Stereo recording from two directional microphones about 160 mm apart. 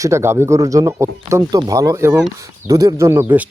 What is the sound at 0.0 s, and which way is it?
Speech, 15° right (ahead or behind).